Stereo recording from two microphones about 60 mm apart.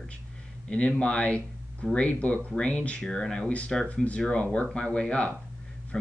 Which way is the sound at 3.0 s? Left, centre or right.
Centre.